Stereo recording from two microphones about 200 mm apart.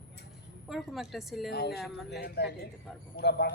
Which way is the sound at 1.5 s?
55° left (ahead or behind).